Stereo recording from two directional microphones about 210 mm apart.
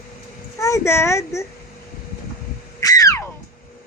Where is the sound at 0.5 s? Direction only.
15° left (ahead or behind).